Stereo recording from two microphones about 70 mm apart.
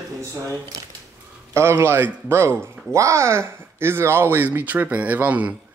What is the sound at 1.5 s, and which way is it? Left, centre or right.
Speech, right.